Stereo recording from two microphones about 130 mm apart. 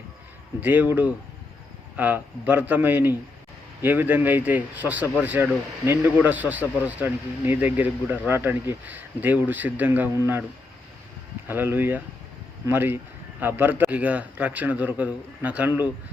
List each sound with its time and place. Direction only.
0.6 s a man's voice: 15° right (ahead or behind)
11.4 s a man's voice: 15° right (ahead or behind)